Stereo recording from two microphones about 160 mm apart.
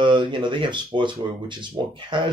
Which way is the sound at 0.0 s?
30° right (ahead or behind).